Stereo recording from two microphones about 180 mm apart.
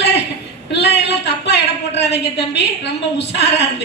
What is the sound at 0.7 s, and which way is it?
A woman's voice, 70° left (ahead or behind).